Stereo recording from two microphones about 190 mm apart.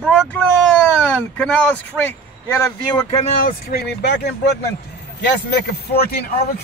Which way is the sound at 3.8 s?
65° left (ahead or behind).